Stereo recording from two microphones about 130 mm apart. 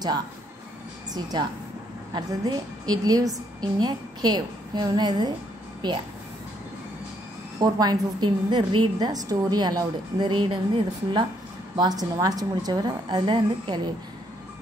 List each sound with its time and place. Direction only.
2.1 s a woman's voice: 30° right (ahead or behind)
7.6 s a woman's voice: 30° right (ahead or behind)